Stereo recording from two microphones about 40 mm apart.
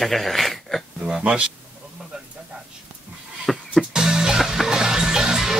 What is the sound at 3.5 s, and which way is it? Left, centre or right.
Music, centre.